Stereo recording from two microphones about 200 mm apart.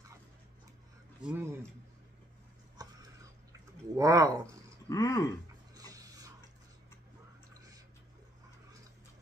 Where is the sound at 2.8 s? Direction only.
20° right (ahead or behind).